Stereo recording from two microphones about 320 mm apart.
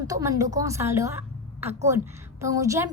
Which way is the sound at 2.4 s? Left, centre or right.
Centre.